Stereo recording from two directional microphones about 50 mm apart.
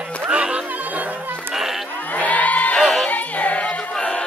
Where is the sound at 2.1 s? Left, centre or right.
Left.